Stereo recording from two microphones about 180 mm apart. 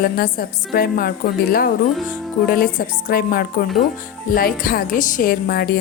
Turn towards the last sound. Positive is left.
turn(degrees=55)  # may be behind; listen again after turning